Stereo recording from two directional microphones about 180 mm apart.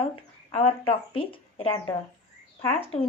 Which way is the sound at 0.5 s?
30° left (ahead or behind).